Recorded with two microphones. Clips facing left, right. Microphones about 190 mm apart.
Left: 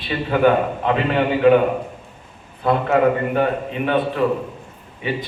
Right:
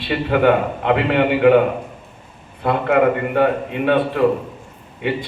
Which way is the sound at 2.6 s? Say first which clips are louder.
Right 1 dB; 65° right (ahead or behind).